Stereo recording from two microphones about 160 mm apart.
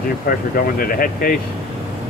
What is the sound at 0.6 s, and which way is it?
Speech, 65° left (ahead or behind).